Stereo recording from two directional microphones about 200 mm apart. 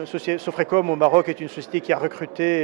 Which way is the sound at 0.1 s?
10° right (ahead or behind).